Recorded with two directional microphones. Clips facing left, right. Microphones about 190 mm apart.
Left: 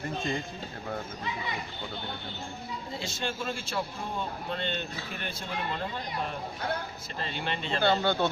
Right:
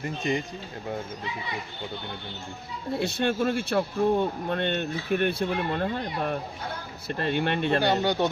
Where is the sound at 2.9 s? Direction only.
60° right (ahead or behind).